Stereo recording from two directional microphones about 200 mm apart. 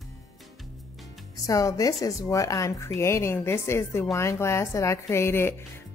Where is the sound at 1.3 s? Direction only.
15° left (ahead or behind).